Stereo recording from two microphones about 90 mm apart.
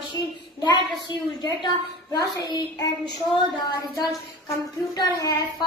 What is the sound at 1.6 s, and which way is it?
A woman's voice, 55° left (ahead or behind).